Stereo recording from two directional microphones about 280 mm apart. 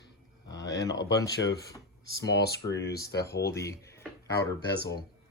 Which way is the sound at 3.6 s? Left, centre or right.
Centre.